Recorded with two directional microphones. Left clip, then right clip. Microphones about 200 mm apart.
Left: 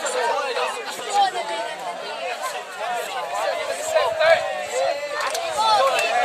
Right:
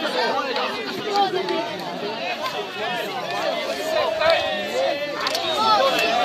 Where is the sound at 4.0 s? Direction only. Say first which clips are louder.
Left 2 dB; 55° left (ahead or behind).